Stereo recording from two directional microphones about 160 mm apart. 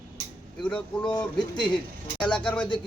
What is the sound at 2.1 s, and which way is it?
Speech, 5° left (ahead or behind).